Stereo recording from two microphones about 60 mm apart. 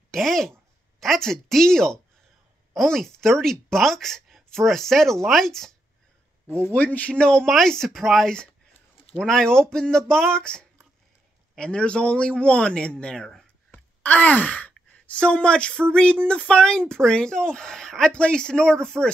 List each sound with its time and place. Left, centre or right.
0.1 s a woman's voice: centre
6.5 s speech: left; by 13.3 s centre
13.7 s speech: left